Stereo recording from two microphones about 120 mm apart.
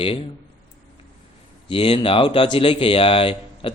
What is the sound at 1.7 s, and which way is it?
Speech, 50° left (ahead or behind).